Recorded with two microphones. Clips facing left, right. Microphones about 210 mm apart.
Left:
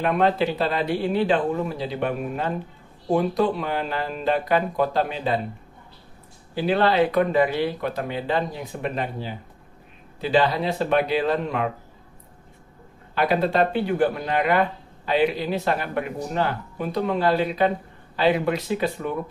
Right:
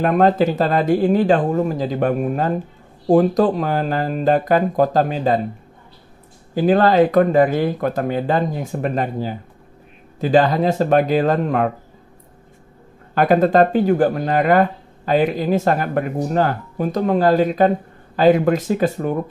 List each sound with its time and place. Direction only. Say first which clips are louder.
0.0 s speech: right 6 dB; 45° right (ahead or behind)
6.5 s speech: right 6 dB; 45° right (ahead or behind)
13.1 s speech: right 7 dB; 45° right (ahead or behind)